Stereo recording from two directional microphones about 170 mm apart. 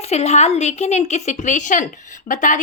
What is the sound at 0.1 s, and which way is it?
Speech, 40° left (ahead or behind).